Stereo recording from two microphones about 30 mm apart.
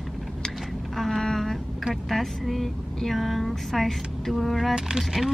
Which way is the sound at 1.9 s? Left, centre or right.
Centre.